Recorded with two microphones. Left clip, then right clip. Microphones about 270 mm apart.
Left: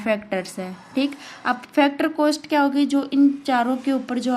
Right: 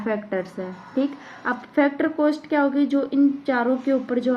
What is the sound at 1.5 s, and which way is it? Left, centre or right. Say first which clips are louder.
A woman's voice: left 2 dB; left.